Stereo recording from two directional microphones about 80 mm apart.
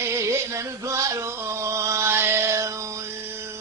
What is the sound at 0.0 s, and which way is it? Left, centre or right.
Male singing, right.